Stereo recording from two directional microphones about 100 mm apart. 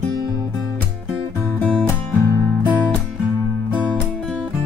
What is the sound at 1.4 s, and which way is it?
Music, 25° left (ahead or behind).